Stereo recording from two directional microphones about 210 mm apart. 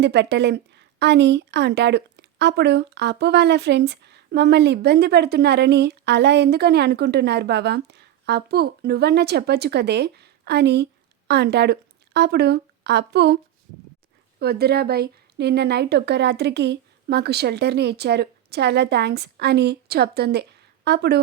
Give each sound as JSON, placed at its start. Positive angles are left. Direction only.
{"t": 0.0, "sound": "a woman's voice", "side_deg": -55}